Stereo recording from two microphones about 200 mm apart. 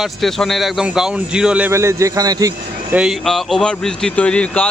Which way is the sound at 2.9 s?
Centre (ahead or behind).